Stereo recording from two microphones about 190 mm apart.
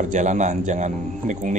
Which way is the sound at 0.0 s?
40° right (ahead or behind).